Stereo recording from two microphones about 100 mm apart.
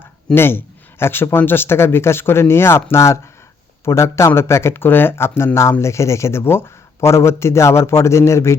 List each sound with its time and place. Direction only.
0.3 s speech: 25° left (ahead or behind)